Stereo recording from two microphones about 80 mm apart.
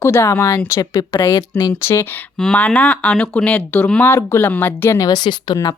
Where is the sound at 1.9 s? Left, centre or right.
Left.